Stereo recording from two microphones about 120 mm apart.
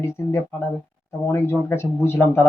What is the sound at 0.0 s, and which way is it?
Speech, 20° left (ahead or behind).